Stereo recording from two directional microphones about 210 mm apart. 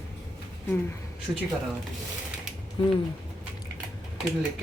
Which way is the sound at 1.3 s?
15° right (ahead or behind).